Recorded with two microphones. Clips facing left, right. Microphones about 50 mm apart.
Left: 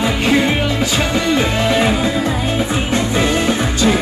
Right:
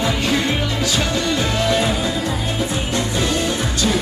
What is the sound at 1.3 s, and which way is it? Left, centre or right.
Music, left.